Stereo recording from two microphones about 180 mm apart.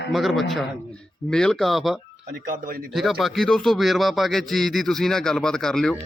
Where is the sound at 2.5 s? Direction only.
50° right (ahead or behind).